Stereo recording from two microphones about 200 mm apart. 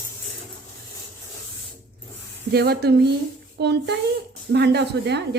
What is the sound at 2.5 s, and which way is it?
Speech, 55° right (ahead or behind).